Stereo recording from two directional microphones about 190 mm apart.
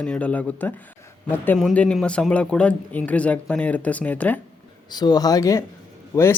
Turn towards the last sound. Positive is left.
turn(degrees=15)  # may be behind; listen again after turning